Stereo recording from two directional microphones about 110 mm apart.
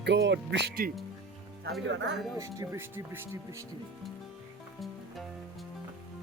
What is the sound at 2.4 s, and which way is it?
Speech, 25° right (ahead or behind).